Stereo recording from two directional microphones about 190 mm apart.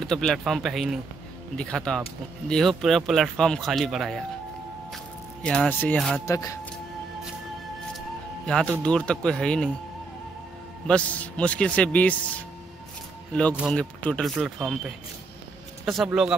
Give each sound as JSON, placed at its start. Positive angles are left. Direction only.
{"t": 0.0, "sound": "speech", "side_deg": 0}
{"t": 6.2, "sound": "a man's voice", "side_deg": 15}
{"t": 8.8, "sound": "speech", "side_deg": 5}
{"t": 10.9, "sound": "a man's voice", "side_deg": 5}
{"t": 15.8, "sound": "speech", "side_deg": 0}